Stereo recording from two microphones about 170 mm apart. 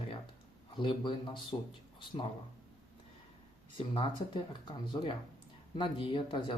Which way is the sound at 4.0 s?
25° left (ahead or behind).